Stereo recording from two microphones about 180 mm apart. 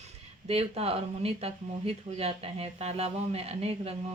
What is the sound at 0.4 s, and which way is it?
Speech, 35° right (ahead or behind).